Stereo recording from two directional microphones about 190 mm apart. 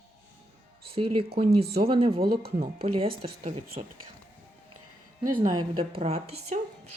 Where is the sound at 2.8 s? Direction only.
30° right (ahead or behind).